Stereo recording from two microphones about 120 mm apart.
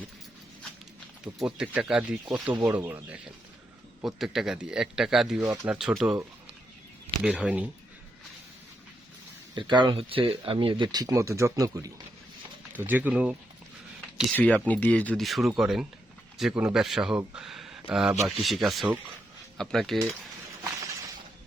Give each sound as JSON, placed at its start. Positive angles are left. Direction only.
{"t": 1.2, "sound": "speech", "side_deg": -5}
{"t": 4.0, "sound": "speech", "side_deg": 0}
{"t": 7.2, "sound": "speech", "side_deg": -10}
{"t": 9.6, "sound": "speech", "side_deg": -40}
{"t": 12.7, "sound": "speech", "side_deg": -15}
{"t": 14.3, "sound": "speech", "side_deg": 10}
{"t": 15.2, "sound": "speech", "side_deg": 0}
{"t": 17.3, "sound": "a sound", "side_deg": -5}
{"t": 18.2, "sound": "speech", "side_deg": 0}